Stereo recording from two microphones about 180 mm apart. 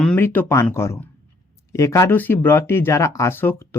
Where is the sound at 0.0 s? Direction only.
10° left (ahead or behind).